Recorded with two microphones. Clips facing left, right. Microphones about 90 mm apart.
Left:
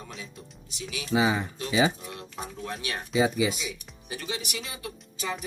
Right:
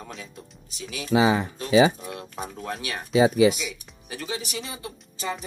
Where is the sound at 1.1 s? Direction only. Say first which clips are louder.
Right 4 dB; 90° right.